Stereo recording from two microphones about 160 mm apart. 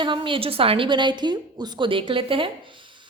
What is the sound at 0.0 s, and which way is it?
A woman's voice, 30° right (ahead or behind).